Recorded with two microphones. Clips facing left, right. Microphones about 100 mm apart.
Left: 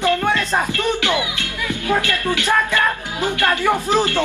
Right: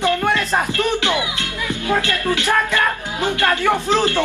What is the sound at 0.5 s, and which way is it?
Music, 20° right (ahead or behind).